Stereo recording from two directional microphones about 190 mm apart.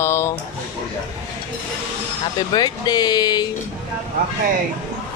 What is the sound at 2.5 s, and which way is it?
Speech, 20° left (ahead or behind).